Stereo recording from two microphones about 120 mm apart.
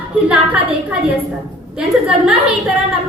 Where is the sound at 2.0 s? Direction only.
5° right (ahead or behind).